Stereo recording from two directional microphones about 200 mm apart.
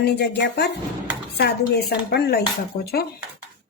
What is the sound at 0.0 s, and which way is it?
Speech, 55° left (ahead or behind).